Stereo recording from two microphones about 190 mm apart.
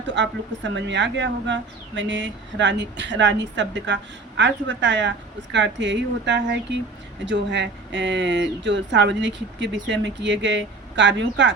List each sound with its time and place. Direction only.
0.1 s speech: 75° right (ahead or behind)